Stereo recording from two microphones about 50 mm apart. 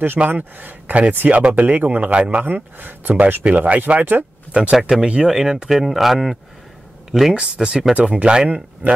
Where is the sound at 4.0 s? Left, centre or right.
Right.